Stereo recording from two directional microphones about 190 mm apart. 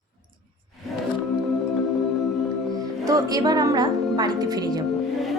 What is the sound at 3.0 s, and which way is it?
A woman's voice, 20° right (ahead or behind).